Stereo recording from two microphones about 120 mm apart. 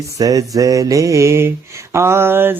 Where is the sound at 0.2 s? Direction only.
30° right (ahead or behind).